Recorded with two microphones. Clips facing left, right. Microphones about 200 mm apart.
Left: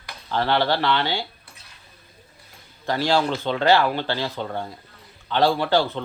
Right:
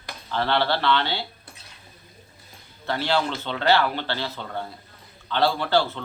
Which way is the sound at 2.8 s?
15° left (ahead or behind).